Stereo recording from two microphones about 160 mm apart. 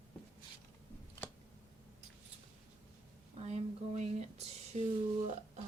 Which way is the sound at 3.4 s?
45° right (ahead or behind).